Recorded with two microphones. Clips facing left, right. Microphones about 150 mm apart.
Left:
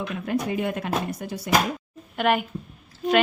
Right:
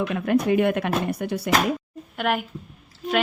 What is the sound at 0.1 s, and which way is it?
Speech, 65° right (ahead or behind).